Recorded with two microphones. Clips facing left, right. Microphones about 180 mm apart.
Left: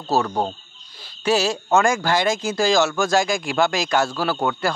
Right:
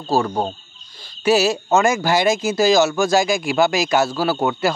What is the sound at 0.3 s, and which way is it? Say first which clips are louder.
Speech: right 1 dB; 15° right (ahead or behind).